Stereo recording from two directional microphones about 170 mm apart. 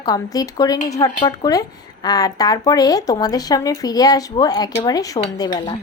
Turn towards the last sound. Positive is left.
turn(degrees=25)  # may be behind; listen again after turning